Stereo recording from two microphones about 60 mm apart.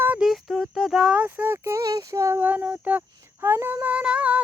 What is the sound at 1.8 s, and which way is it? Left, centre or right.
Female singing, right.